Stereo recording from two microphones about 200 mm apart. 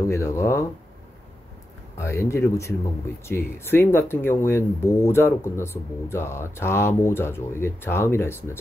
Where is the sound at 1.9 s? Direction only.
15° left (ahead or behind).